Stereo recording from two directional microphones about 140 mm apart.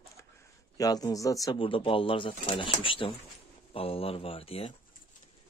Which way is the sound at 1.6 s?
40° left (ahead or behind).